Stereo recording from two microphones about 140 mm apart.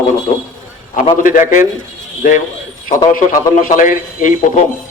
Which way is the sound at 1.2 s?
70° left (ahead or behind).